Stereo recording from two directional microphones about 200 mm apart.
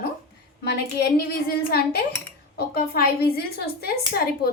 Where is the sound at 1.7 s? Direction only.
50° left (ahead or behind).